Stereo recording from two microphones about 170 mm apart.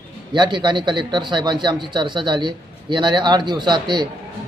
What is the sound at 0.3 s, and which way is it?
A man's voice, 25° right (ahead or behind).